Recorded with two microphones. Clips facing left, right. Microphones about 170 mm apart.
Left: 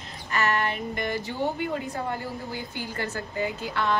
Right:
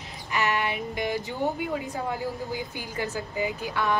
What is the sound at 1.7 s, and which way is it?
A woman's voice, 5° right (ahead or behind).